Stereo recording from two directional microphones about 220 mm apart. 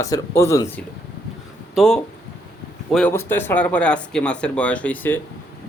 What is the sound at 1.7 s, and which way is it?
Speech, centre (ahead or behind).